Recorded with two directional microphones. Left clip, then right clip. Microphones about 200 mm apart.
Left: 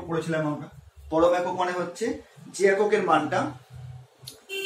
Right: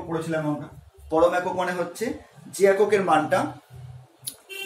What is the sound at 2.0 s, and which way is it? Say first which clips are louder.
Speech: even; 55° right (ahead or behind).